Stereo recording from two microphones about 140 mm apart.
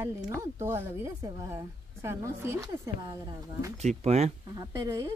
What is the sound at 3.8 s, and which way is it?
Speech, 50° right (ahead or behind).